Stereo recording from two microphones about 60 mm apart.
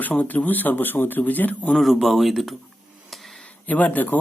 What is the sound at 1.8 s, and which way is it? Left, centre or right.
Speech, centre.